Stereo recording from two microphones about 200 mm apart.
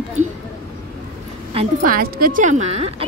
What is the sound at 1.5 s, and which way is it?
Speech, 30° right (ahead or behind).